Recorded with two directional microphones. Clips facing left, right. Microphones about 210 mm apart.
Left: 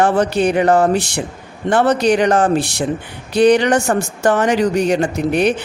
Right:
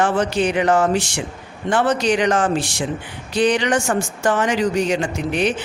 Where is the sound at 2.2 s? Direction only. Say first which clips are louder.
Left 4 dB; 40° left (ahead or behind).